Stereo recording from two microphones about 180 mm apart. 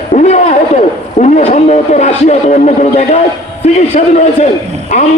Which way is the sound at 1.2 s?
35° left (ahead or behind).